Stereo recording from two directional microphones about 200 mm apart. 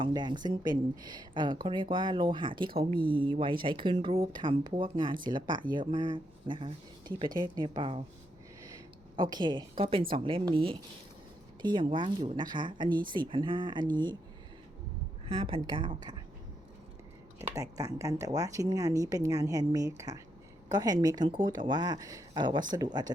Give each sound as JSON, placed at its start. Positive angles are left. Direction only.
{"t": 0.0, "sound": "speech", "side_deg": -20}
{"t": 9.1, "sound": "speech", "side_deg": -20}
{"t": 15.3, "sound": "speech", "side_deg": -25}
{"t": 17.5, "sound": "a woman's voice", "side_deg": -15}